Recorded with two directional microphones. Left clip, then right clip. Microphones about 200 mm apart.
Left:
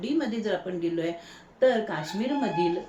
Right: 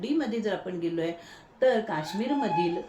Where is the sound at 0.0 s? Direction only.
10° right (ahead or behind).